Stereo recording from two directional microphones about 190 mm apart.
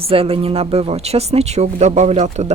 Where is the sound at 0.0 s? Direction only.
30° right (ahead or behind).